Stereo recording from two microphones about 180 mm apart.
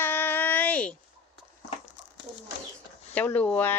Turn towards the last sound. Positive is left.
turn(degrees=10)  # may be behind; listen again after turning